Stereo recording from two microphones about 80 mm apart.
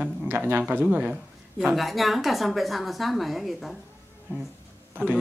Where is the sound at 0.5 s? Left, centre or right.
Right.